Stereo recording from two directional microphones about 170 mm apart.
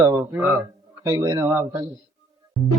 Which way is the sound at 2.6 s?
5° left (ahead or behind).